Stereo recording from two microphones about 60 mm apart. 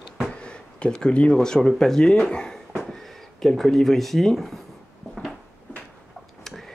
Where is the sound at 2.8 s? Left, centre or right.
Centre.